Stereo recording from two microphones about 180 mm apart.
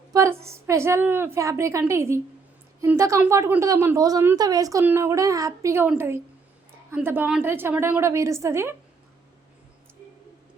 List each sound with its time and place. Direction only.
0.1 s a woman's voice: 15° right (ahead or behind)